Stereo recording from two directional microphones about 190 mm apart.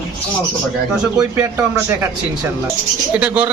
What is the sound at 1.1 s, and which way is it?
Speech, 10° right (ahead or behind).